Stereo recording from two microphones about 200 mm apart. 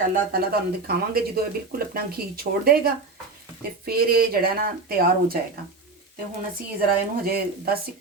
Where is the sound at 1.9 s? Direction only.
45° right (ahead or behind).